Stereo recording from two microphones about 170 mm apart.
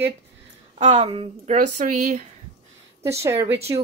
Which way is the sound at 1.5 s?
50° right (ahead or behind).